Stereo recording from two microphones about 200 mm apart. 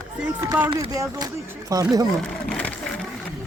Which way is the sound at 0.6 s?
20° right (ahead or behind).